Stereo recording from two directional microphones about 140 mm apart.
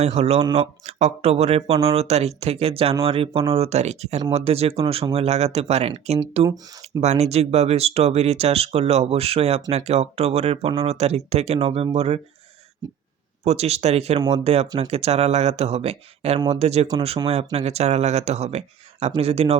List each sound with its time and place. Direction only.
0.0 s speech: 50° right (ahead or behind)
13.4 s speech: 50° right (ahead or behind)